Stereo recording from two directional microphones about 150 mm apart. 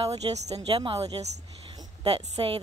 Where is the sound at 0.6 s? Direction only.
35° right (ahead or behind).